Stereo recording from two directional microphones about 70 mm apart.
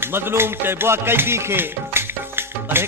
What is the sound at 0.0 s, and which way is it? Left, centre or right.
Music, right.